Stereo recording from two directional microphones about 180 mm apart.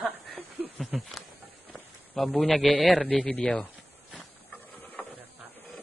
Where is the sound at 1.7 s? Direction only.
Centre (ahead or behind).